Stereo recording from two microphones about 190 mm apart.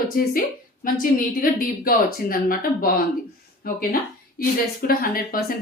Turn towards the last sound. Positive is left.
turn(degrees=50)  # may be behind; listen again after turning